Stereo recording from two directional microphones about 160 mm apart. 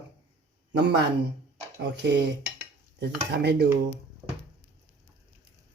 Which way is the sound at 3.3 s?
90° right.